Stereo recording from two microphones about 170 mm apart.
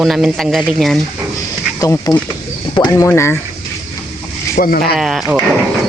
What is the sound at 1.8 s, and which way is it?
Speech, 20° left (ahead or behind).